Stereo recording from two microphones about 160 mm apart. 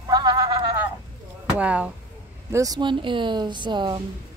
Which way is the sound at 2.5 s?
20° right (ahead or behind).